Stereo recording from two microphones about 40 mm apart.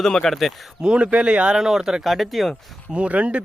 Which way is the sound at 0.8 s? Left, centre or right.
Right.